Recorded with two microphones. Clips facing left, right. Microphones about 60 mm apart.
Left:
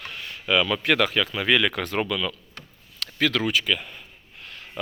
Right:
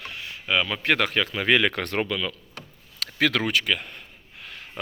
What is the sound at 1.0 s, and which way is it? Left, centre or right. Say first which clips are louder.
Speech: left 1 dB; right.